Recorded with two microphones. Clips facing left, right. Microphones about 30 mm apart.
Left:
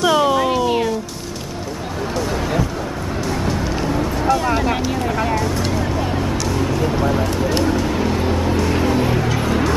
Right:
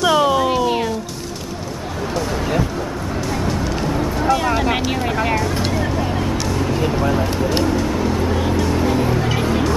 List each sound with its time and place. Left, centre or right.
0.0 s music: centre
3.4 s music: centre
4.6 s speech: centre
5.6 s vehicle: centre
5.9 s vehicle: centre
6.7 s a sound: centre
7.0 s speech: centre
7.6 s vehicle: centre
8.8 s a sound: centre
9.4 s music: centre